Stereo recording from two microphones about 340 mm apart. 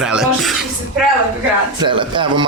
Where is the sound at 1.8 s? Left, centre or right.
Centre.